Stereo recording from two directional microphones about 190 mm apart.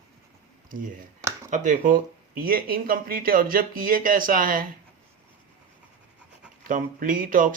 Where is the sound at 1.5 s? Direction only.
40° right (ahead or behind).